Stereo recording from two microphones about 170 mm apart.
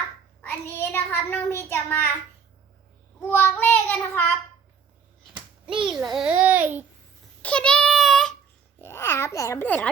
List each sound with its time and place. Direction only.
0.4 s a child's voice: 15° left (ahead or behind)
3.2 s child singing: 15° left (ahead or behind)
5.6 s a child's voice: 30° right (ahead or behind)
5.9 s a child's voice: centre (ahead or behind)
7.4 s child singing: 5° left (ahead or behind)
8.8 s a child's voice: 15° left (ahead or behind)